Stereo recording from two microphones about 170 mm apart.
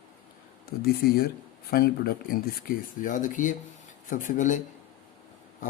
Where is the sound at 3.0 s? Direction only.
50° left (ahead or behind).